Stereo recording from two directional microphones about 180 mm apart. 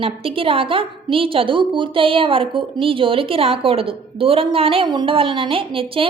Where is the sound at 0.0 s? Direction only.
30° right (ahead or behind).